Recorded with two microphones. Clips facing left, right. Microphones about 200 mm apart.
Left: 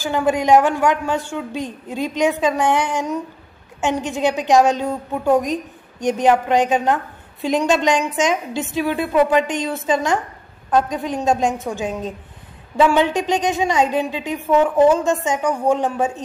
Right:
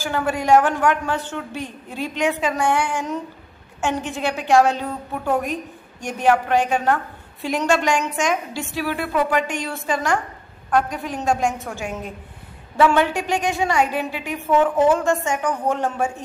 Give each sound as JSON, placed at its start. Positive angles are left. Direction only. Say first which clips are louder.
{"t": 0.0, "sound": "a woman's voice", "louder": "left 4 dB", "side_deg": 20}